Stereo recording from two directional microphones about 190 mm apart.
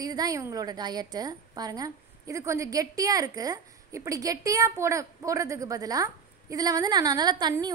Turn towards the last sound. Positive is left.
turn(degrees=-20)  # may be behind; listen again after turning